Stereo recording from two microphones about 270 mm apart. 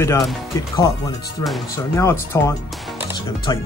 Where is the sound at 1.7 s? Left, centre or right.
Centre.